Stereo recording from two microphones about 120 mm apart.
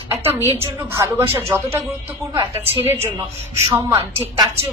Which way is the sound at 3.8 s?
20° right (ahead or behind).